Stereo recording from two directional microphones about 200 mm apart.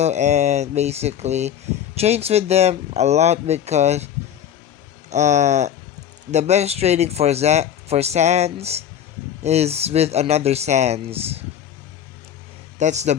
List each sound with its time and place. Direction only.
0.0 s speech: 35° right (ahead or behind)
5.1 s speech: 35° right (ahead or behind)
12.8 s speech: 35° right (ahead or behind)